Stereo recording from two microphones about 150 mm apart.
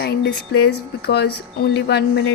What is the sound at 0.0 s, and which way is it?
Speech, 90° left.